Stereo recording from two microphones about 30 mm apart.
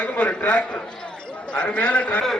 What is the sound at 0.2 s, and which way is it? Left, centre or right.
Speech, left.